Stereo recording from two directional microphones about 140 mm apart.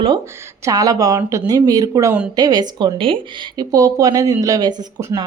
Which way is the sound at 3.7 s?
25° right (ahead or behind).